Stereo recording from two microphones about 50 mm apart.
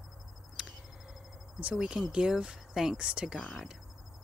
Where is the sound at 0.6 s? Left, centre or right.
Centre.